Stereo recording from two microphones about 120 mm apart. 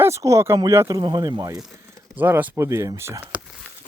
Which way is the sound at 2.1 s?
15° right (ahead or behind).